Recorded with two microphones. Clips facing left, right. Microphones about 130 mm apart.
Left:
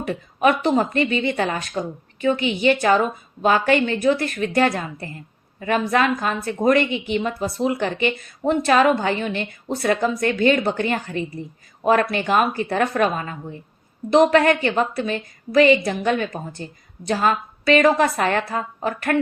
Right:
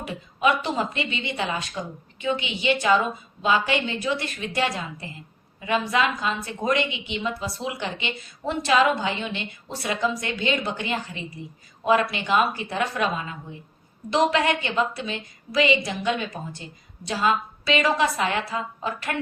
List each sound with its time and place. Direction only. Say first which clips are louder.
0.1 s a woman's voice: left 4 dB; 50° left (ahead or behind)